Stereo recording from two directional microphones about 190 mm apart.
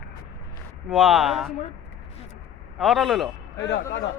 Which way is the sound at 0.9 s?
Centre (ahead or behind).